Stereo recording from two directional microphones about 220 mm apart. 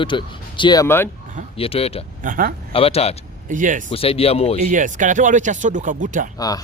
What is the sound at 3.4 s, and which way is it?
Speech, 35° right (ahead or behind).